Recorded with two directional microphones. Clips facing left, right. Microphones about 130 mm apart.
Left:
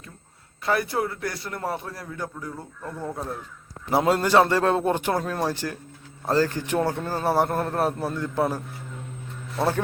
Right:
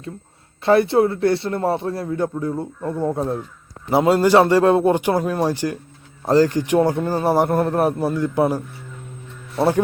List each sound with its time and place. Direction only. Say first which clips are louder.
0.6 s a man's voice: right 10 dB; 25° right (ahead or behind)
3.8 s a man's voice: right 6 dB; 5° right (ahead or behind)